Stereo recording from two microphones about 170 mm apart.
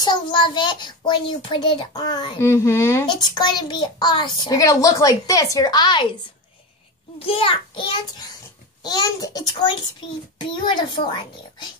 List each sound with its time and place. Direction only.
0.0 s a child's voice: 25° left (ahead or behind)
7.2 s a child's voice: 35° left (ahead or behind)